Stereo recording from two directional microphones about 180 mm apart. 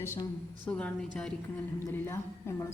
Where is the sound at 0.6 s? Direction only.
5° left (ahead or behind).